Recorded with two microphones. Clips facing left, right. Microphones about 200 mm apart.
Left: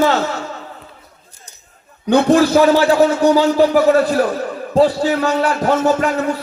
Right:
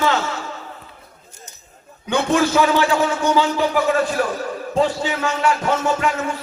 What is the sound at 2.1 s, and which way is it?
A man's voice, 35° left (ahead or behind).